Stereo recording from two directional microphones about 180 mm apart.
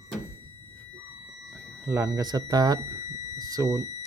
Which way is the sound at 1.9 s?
15° right (ahead or behind).